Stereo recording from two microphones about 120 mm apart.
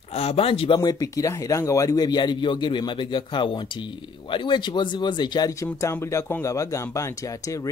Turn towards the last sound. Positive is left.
turn(degrees=30)  # may be behind; listen again after turning